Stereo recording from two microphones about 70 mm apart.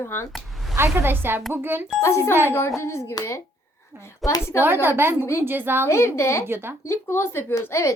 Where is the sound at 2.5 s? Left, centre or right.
Left.